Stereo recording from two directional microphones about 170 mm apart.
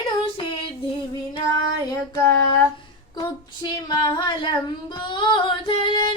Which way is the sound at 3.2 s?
25° left (ahead or behind).